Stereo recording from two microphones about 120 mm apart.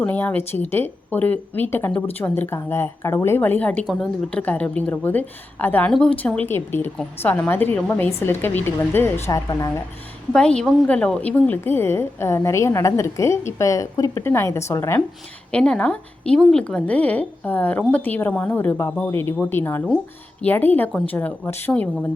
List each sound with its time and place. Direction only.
0.0 s a woman's voice: 15° left (ahead or behind)
9.2 s a woman's voice: 30° left (ahead or behind)
10.3 s a woman's voice: 5° left (ahead or behind); by 15.0 s 20° left (ahead or behind)
15.5 s speech: 10° left (ahead or behind)